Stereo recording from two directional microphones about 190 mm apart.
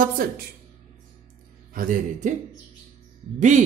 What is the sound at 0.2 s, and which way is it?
Speech, 50° right (ahead or behind).